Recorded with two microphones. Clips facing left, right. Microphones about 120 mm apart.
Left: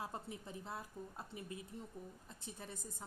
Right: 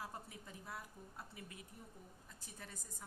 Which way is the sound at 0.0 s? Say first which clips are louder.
Left 4 dB; 25° left (ahead or behind).